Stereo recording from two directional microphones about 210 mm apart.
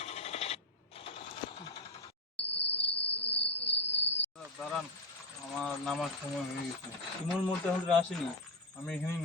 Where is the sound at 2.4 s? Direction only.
55° left (ahead or behind).